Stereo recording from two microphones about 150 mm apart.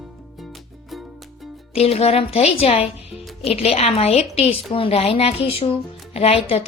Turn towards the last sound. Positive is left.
turn(degrees=40)  # may be behind; listen again after turning